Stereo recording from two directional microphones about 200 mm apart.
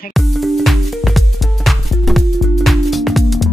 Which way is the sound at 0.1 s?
Centre (ahead or behind).